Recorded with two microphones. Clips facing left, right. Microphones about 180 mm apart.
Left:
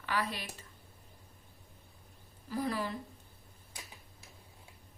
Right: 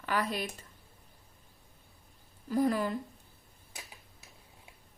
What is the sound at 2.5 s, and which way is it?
Speech, 45° right (ahead or behind).